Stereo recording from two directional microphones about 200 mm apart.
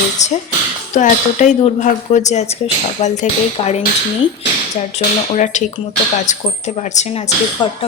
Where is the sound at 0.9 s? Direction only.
35° left (ahead or behind).